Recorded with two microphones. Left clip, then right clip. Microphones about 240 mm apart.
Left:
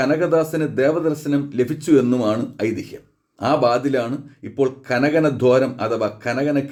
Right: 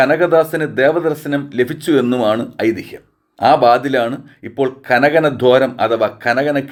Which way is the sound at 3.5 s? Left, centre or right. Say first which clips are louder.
Right 5 dB; centre.